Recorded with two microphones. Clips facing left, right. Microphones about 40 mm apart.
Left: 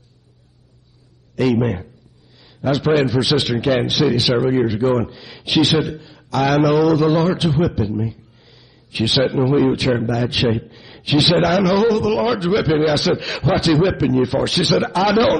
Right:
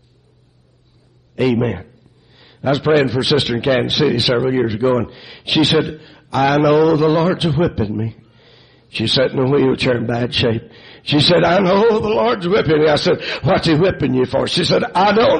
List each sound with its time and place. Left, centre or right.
1.3 s a man's voice: centre